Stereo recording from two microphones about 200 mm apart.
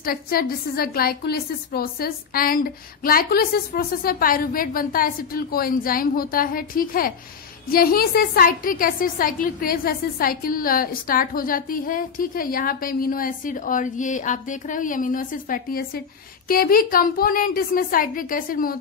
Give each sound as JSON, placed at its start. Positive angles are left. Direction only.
{"t": 0.0, "sound": "a woman's voice", "side_deg": 45}